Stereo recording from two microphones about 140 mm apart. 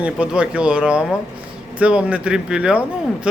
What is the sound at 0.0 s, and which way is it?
Speech, 10° right (ahead or behind).